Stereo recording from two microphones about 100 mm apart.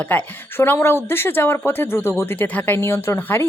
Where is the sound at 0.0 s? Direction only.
20° left (ahead or behind).